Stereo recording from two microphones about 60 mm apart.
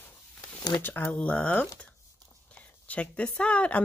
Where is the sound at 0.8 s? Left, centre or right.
Left.